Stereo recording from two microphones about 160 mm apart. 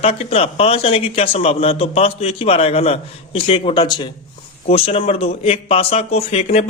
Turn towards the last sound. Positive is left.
turn(degrees=40)  # may be behind; listen again after turning